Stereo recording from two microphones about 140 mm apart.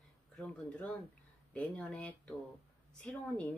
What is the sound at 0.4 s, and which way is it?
Speech, 5° left (ahead or behind).